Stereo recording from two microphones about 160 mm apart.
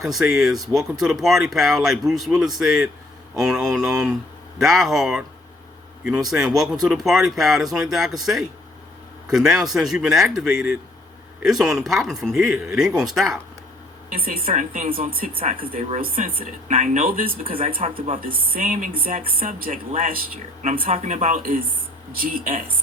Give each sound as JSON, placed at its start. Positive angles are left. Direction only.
{"t": 0.1, "sound": "speech", "side_deg": 0}
{"t": 6.3, "sound": "speech", "side_deg": 0}
{"t": 14.4, "sound": "speech", "side_deg": -50}
{"t": 15.3, "sound": "speech", "side_deg": -35}
{"t": 16.0, "sound": "speech", "side_deg": -65}
{"t": 16.7, "sound": "speech", "side_deg": -50}
{"t": 17.7, "sound": "speech", "side_deg": -35}
{"t": 18.1, "sound": "speech", "side_deg": -60}